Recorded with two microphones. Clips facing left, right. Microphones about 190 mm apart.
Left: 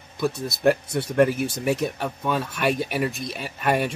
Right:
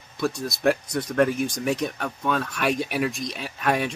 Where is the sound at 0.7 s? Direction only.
5° left (ahead or behind).